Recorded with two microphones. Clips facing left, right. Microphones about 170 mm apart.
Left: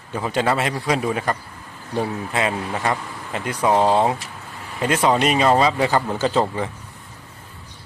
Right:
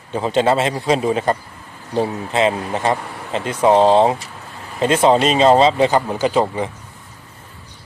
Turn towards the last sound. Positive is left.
turn(degrees=-15)  # may be behind; listen again after turning